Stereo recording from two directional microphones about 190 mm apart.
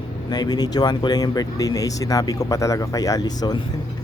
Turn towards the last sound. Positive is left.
turn(degrees=20)  # may be behind; listen again after turning